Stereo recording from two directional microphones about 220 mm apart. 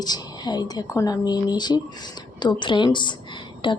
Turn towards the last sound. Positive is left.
turn(degrees=20)  # may be behind; listen again after turning